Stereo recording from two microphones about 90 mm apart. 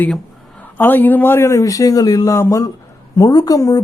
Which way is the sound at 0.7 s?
20° left (ahead or behind).